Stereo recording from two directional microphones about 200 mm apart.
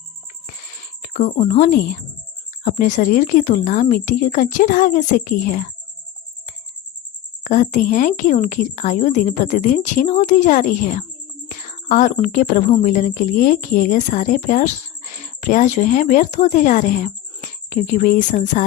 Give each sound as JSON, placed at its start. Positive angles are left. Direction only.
{"t": 1.0, "sound": "a woman's voice", "side_deg": 35}
{"t": 7.4, "sound": "a woman's voice", "side_deg": 40}